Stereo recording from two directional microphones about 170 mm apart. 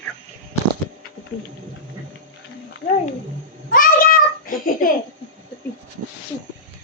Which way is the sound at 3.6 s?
55° left (ahead or behind).